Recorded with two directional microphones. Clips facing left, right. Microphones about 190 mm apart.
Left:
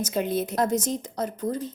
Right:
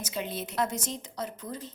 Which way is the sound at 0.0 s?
45° left (ahead or behind).